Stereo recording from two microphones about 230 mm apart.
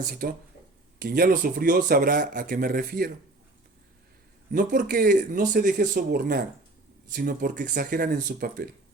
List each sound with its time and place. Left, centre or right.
0.1 s a man's voice: right
4.5 s a man's voice: right